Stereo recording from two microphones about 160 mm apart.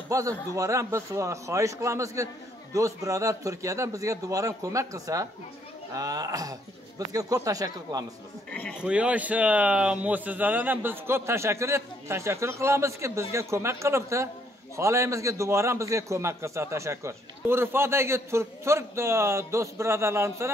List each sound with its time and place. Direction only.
0.1 s a man's voice: 20° right (ahead or behind)
8.8 s a man's voice: 5° right (ahead or behind)